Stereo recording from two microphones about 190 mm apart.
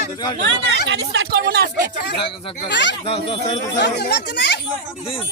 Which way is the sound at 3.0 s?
30° left (ahead or behind).